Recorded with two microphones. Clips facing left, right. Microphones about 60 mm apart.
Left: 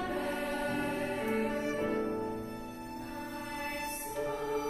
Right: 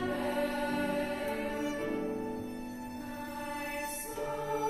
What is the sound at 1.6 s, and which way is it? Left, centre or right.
Music, left.